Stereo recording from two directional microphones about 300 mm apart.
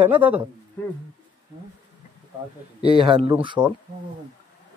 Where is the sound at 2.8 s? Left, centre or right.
Centre.